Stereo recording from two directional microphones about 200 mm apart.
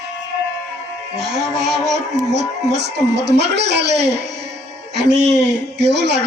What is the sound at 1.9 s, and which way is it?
Speech, 60° right (ahead or behind).